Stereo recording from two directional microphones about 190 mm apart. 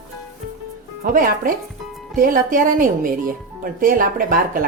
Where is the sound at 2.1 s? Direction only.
45° right (ahead or behind).